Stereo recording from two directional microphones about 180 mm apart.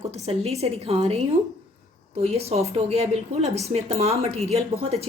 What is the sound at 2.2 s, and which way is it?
A woman's voice, 35° right (ahead or behind).